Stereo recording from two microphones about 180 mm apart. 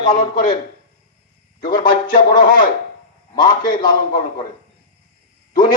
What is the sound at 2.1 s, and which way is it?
A man's voice, 25° left (ahead or behind).